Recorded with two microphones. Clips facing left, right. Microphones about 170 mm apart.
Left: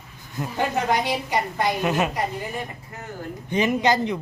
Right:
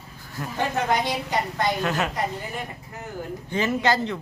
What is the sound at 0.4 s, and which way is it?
A woman's voice, 20° left (ahead or behind).